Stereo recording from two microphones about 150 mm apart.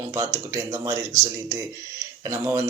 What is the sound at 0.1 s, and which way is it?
Speech, 20° right (ahead or behind).